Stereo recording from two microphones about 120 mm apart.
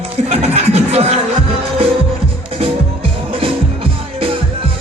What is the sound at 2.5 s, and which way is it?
Music, 50° right (ahead or behind).